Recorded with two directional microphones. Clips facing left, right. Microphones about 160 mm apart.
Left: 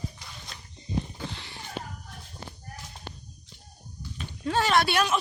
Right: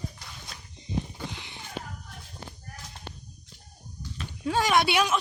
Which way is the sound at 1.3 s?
15° right (ahead or behind).